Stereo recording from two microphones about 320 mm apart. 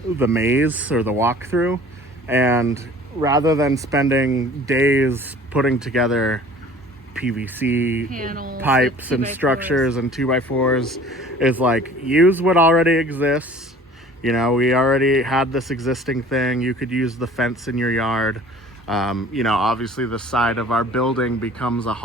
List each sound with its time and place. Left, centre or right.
0.2 s speech: centre
8.1 s speech: right
8.6 s speech: centre